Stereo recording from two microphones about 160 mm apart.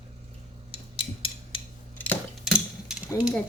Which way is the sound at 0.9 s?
35° left (ahead or behind).